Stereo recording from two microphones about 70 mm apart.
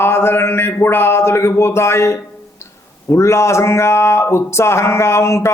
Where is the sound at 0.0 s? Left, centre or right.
Left.